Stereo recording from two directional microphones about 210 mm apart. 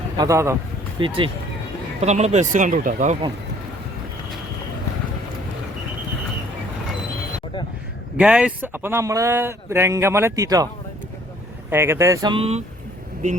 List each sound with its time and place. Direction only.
0.2 s a man's voice: 15° right (ahead or behind)
0.9 s speech: 25° right (ahead or behind)
8.1 s a man's voice: 5° right (ahead or behind)
11.7 s a man's voice: 10° right (ahead or behind); by 12.6 s 30° right (ahead or behind)